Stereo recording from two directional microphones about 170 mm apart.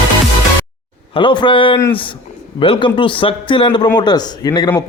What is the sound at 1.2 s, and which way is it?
Speech, 30° left (ahead or behind).